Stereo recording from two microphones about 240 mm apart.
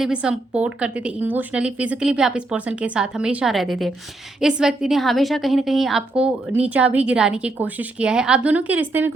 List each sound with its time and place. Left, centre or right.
0.0 s a woman's voice: centre